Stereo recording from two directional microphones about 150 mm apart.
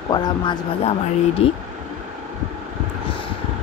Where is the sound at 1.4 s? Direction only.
40° left (ahead or behind).